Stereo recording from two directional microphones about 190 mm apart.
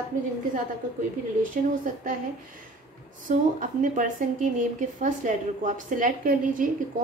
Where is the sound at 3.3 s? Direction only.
45° right (ahead or behind).